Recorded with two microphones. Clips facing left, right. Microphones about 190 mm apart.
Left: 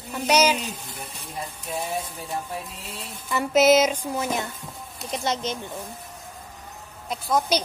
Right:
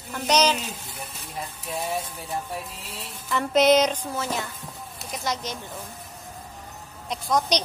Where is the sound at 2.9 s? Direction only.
5° left (ahead or behind).